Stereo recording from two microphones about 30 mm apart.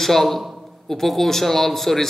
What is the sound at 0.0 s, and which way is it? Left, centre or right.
A man's voice, centre.